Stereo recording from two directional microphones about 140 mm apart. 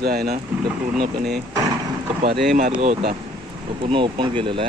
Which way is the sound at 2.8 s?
80° right.